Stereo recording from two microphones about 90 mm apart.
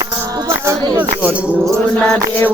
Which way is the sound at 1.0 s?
15° right (ahead or behind).